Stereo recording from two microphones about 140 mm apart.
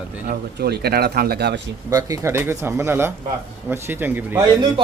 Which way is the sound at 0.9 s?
90° right.